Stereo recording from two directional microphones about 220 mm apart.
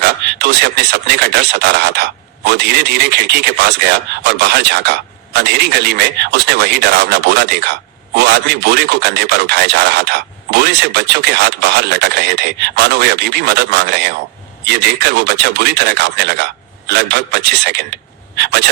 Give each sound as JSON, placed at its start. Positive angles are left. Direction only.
{"t": 0.0, "sound": "speech", "side_deg": -50}